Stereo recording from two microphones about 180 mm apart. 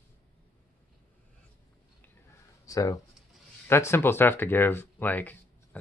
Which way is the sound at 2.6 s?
20° left (ahead or behind).